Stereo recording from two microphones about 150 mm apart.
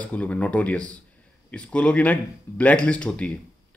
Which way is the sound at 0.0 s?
10° left (ahead or behind).